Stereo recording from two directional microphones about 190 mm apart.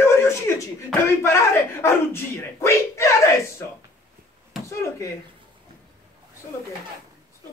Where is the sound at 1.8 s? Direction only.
15° left (ahead or behind).